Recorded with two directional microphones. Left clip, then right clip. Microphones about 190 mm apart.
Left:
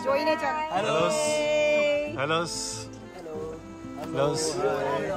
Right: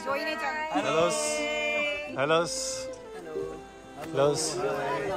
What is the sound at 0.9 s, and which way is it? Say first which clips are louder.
Speech: left 2 dB; 10° left (ahead or behind).